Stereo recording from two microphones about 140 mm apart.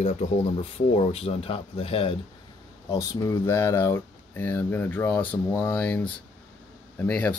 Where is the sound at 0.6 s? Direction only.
45° left (ahead or behind).